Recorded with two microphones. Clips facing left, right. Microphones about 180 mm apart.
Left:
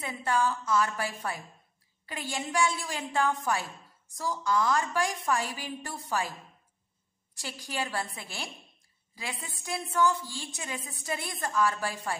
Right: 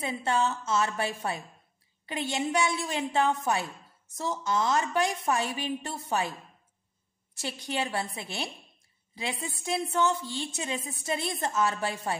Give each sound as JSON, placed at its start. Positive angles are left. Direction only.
{"t": 0.0, "sound": "a woman's voice", "side_deg": -25}
{"t": 7.3, "sound": "a woman's voice", "side_deg": -20}